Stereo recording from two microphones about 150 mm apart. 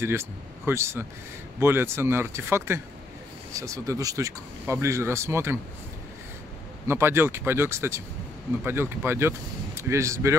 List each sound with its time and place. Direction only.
0.0 s speech: 15° right (ahead or behind)
6.9 s speech: 15° right (ahead or behind)